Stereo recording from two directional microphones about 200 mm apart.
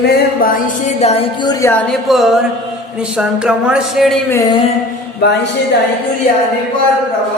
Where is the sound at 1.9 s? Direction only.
Centre (ahead or behind).